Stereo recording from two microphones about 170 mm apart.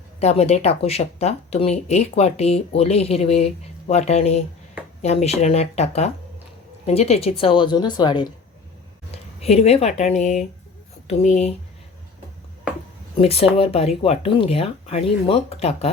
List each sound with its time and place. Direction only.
0.2 s a woman's voice: 40° left (ahead or behind)
9.1 s speech: 35° left (ahead or behind)
13.1 s speech: 35° left (ahead or behind)